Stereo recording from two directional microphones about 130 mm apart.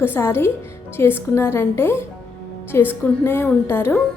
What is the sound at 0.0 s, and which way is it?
A woman's voice, 20° left (ahead or behind).